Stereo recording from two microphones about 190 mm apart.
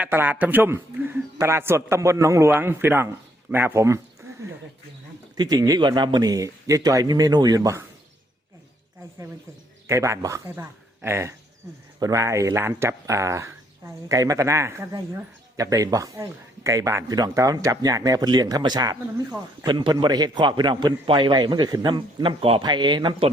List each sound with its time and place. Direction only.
0.0 s a man's voice: 10° right (ahead or behind)
9.8 s speech: 15° right (ahead or behind)